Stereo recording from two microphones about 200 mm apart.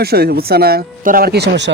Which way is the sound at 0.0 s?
50° right (ahead or behind).